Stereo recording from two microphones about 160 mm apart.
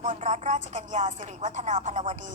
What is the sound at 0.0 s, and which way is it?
Speech, 50° right (ahead or behind).